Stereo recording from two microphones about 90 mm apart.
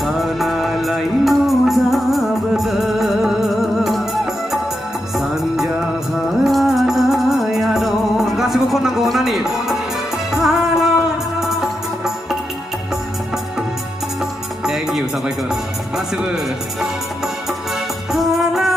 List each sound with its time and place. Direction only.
0.0 s music: centre (ahead or behind)
14.6 s music: 5° right (ahead or behind)